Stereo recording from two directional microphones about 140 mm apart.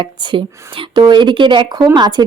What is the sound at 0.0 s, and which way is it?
A woman's voice, 35° right (ahead or behind).